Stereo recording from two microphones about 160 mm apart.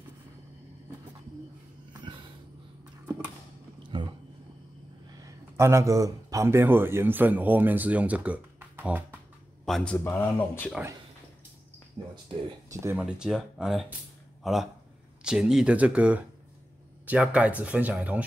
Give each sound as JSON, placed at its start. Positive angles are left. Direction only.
{"t": 2.0, "sound": "a sound", "side_deg": -30}
{"t": 3.9, "sound": "a sound", "side_deg": -30}
{"t": 5.2, "sound": "a man's voice", "side_deg": -20}
{"t": 9.7, "sound": "speech", "side_deg": 0}
{"t": 9.9, "sound": "speech", "side_deg": 15}
{"t": 12.6, "sound": "speech", "side_deg": -15}
{"t": 13.0, "sound": "speech", "side_deg": -5}